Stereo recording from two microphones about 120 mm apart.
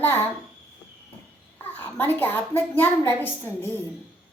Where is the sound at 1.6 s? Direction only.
15° left (ahead or behind).